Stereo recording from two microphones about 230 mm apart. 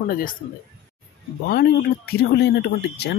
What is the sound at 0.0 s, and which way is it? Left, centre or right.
Speech, left.